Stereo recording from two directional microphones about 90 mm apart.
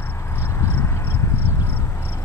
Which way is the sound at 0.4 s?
25° left (ahead or behind).